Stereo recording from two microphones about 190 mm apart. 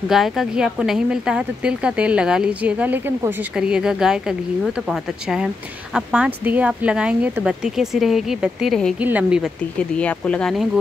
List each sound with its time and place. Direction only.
0.1 s speech: centre (ahead or behind)
9.8 s speech: 5° left (ahead or behind)